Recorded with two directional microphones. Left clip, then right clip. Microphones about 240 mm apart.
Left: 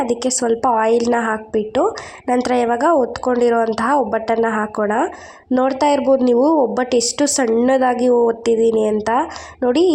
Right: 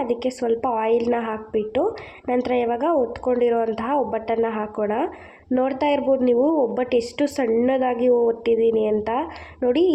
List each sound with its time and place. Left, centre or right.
0.0 s a woman's voice: centre